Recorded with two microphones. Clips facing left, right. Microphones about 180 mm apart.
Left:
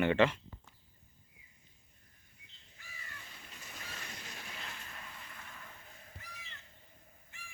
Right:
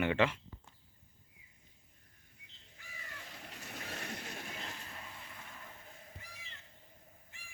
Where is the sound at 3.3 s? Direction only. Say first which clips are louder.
Right 5 dB; 75° right (ahead or behind); by 5.0 s 30° right (ahead or behind).